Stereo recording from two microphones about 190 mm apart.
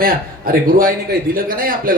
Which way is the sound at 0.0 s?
50° right (ahead or behind).